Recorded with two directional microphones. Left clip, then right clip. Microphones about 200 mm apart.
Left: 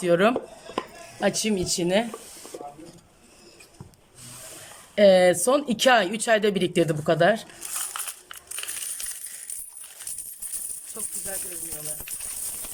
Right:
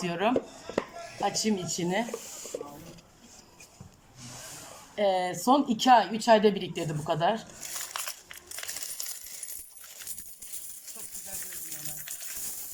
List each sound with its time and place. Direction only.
0.0 s speech: 45° left (ahead or behind)
1.2 s speech: 55° left (ahead or behind)
4.9 s speech: 50° left (ahead or behind)